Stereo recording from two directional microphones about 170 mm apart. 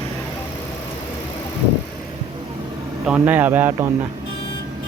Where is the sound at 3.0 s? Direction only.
10° right (ahead or behind).